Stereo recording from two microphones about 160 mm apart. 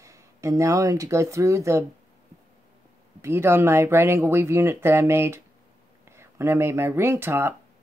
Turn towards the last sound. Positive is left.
turn(degrees=-15)  # may be behind; listen again after turning